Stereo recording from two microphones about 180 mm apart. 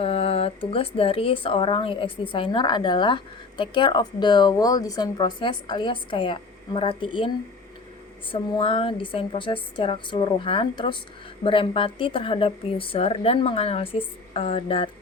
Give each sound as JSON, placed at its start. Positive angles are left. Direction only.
{"t": 0.0, "sound": "speech", "side_deg": 30}
{"t": 8.3, "sound": "speech", "side_deg": 30}